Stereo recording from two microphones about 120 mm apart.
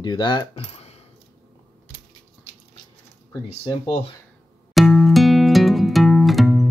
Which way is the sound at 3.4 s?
55° left (ahead or behind).